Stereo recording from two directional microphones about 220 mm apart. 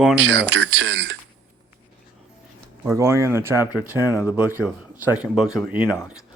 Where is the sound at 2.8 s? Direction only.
10° right (ahead or behind).